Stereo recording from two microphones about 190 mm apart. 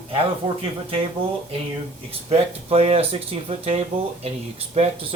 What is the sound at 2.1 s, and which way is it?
Speech, 30° right (ahead or behind).